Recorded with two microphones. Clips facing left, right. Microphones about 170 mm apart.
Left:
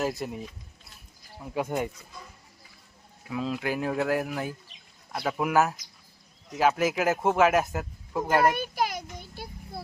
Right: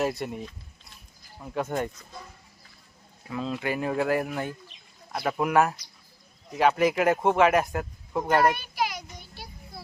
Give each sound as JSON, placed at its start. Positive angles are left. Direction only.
{"t": 0.0, "sound": "speech", "side_deg": 0}
{"t": 1.5, "sound": "speech", "side_deg": 5}
{"t": 3.2, "sound": "speech", "side_deg": 5}
{"t": 8.5, "sound": "children playing", "side_deg": 45}
{"t": 9.3, "sound": "a sound", "side_deg": 50}